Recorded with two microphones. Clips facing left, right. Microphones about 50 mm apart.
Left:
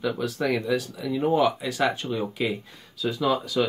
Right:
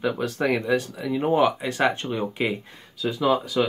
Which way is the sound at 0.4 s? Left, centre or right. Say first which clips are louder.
Right 3 dB; right.